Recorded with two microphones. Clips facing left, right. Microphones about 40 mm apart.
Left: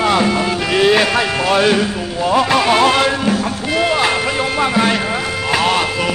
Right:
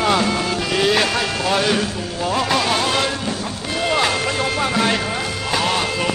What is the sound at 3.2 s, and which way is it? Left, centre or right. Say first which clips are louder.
Music: left 7 dB; left.